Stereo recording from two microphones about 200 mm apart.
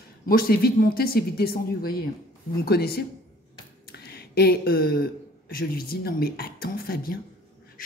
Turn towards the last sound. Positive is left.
turn(degrees=50)  # may be behind; listen again after turning